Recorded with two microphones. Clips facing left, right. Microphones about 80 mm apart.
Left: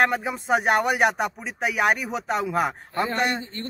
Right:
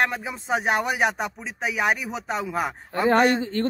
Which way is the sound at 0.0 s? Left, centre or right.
Centre.